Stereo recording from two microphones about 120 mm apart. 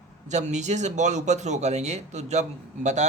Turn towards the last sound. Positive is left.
turn(degrees=-75)  # may be behind; listen again after turning